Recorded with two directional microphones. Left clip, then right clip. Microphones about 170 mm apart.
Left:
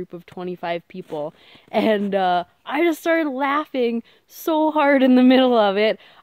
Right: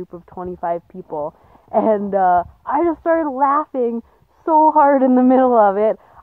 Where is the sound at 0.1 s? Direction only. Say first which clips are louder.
Right 2 dB; 25° left (ahead or behind).